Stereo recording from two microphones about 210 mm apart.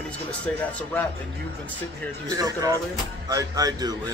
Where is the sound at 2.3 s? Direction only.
15° right (ahead or behind).